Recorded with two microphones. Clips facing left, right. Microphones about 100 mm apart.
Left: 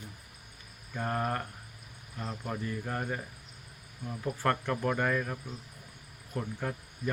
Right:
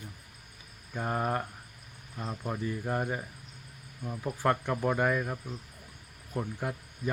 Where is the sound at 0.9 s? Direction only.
10° right (ahead or behind).